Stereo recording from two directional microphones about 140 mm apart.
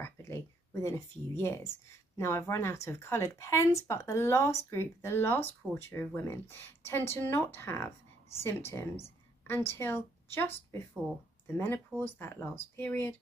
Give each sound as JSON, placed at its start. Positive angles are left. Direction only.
{"t": 0.0, "sound": "speech", "side_deg": 20}